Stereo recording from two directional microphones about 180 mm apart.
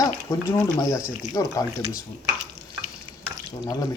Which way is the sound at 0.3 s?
15° left (ahead or behind).